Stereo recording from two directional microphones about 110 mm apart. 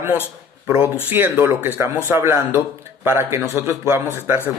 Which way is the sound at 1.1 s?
20° right (ahead or behind).